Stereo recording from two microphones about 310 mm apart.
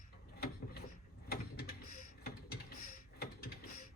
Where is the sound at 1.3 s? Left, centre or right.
Left.